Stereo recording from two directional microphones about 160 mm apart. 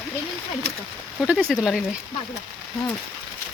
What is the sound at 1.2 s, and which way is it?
Speech, 5° right (ahead or behind).